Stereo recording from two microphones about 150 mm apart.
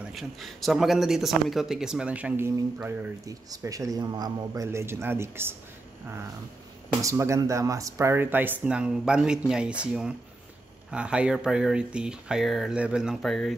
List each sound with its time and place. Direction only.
0.1 s a man's voice: centre (ahead or behind); by 5.6 s 15° right (ahead or behind)
7.0 s speech: 20° right (ahead or behind); by 13.6 s centre (ahead or behind)